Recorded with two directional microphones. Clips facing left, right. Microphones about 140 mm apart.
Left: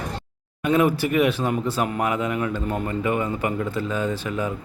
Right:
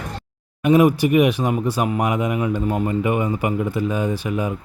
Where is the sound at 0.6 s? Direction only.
15° right (ahead or behind).